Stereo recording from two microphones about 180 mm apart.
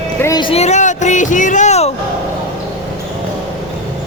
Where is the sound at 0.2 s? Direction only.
20° left (ahead or behind); by 1.9 s 40° left (ahead or behind).